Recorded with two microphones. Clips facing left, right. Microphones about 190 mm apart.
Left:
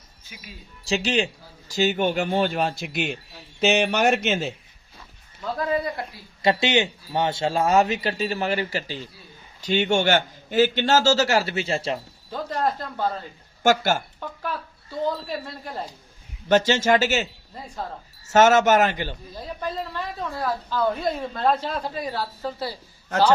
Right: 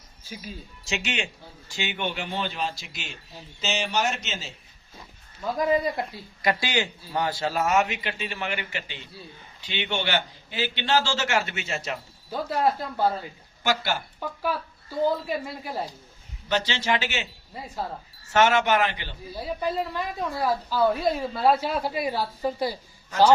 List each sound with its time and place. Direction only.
0.9 s a man's voice: 35° left (ahead or behind); by 4.5 s 55° left (ahead or behind)
4.9 s speech: 15° right (ahead or behind)
6.4 s a man's voice: 25° left (ahead or behind)
12.3 s a woman's voice: 10° right (ahead or behind)
13.6 s a man's voice: 45° left (ahead or behind)
14.2 s a woman's voice: 10° right (ahead or behind)
16.5 s a man's voice: 45° left (ahead or behind)
19.5 s a woman's voice: 10° right (ahead or behind)